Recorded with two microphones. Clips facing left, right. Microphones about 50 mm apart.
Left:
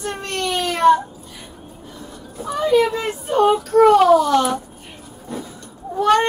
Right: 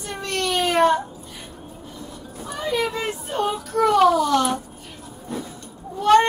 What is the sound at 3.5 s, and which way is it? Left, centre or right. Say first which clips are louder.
Speech: left 8 dB; left.